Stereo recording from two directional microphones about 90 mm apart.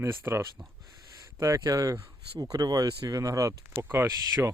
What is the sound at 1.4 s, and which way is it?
Speech, 35° right (ahead or behind).